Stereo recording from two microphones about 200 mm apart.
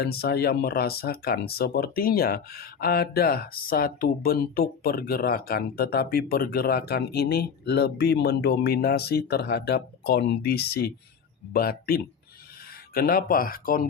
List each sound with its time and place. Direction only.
0.0 s speech: 50° left (ahead or behind)